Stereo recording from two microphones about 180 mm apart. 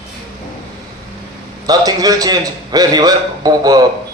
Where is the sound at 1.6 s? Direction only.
20° right (ahead or behind).